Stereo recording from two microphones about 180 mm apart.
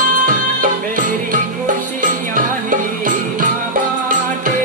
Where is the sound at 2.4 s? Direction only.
50° right (ahead or behind).